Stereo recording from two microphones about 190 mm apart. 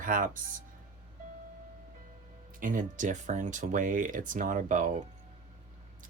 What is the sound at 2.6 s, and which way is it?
Speech, 45° right (ahead or behind).